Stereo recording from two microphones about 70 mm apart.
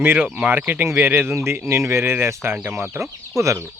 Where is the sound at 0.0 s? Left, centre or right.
Right.